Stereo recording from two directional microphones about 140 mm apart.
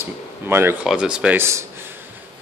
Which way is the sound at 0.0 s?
15° right (ahead or behind).